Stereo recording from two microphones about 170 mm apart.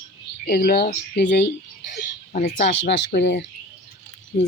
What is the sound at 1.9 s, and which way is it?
Whispering, 45° left (ahead or behind).